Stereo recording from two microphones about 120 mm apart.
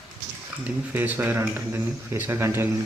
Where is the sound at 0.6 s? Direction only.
15° right (ahead or behind).